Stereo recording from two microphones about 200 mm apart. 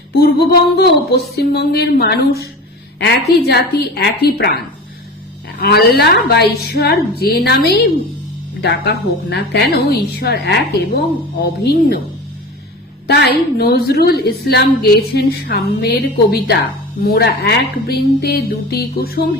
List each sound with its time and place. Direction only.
0.1 s a woman's voice: 55° left (ahead or behind)
13.1 s a woman's voice: 55° left (ahead or behind)
17.0 s a woman's voice: 55° left (ahead or behind)